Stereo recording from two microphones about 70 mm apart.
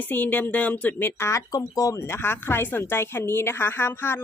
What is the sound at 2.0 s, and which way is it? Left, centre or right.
A woman's voice, left.